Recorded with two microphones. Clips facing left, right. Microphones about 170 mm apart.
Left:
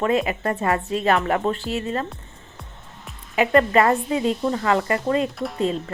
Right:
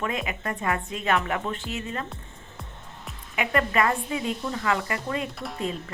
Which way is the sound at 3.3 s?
35° left (ahead or behind).